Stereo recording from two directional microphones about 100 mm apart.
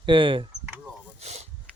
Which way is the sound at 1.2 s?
90° right.